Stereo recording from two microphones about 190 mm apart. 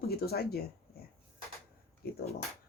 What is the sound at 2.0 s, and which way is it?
Speech, 55° left (ahead or behind).